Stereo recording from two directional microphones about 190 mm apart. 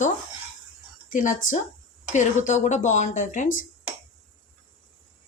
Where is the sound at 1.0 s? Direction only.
45° left (ahead or behind).